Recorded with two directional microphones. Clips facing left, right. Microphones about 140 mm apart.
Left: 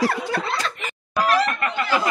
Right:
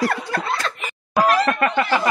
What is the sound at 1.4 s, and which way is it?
Snicker, 60° right (ahead or behind).